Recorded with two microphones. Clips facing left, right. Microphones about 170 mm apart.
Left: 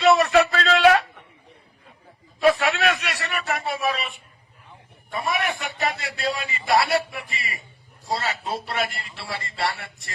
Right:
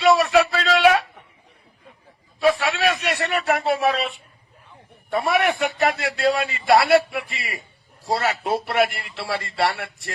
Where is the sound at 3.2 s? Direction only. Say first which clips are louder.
Right 6 dB; 20° right (ahead or behind).